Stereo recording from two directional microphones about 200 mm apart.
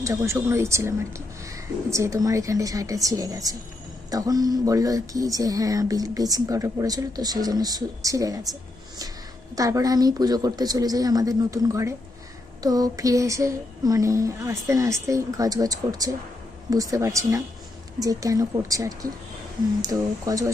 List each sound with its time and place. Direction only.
0.0 s speech: 15° right (ahead or behind)
9.6 s a woman's voice: 15° right (ahead or behind)